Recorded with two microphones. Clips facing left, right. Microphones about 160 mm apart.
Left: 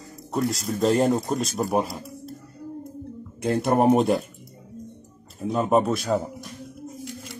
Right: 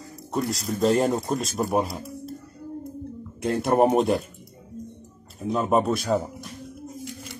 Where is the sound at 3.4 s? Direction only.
Centre (ahead or behind).